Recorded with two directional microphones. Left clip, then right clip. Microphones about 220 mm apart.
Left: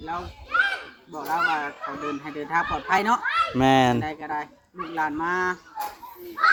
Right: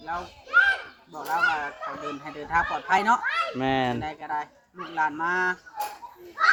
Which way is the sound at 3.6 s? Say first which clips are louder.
Left 6 dB; 30° left (ahead or behind).